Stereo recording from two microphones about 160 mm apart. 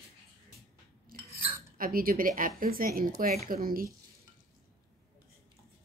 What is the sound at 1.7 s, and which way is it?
Speech, 60° right (ahead or behind).